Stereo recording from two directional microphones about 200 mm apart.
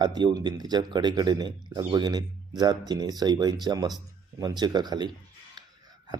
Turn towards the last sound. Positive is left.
turn(degrees=-20)  # may be behind; listen again after turning